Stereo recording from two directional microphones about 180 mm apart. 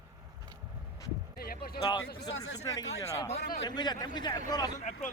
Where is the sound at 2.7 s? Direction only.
20° left (ahead or behind).